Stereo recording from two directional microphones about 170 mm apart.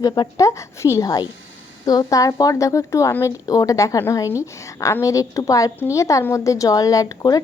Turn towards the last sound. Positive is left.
turn(degrees=20)  # may be behind; listen again after turning